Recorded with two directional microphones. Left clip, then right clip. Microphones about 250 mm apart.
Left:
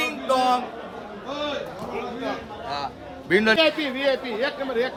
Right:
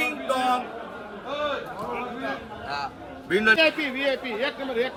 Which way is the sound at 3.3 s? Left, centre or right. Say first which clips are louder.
Left 1 dB; left.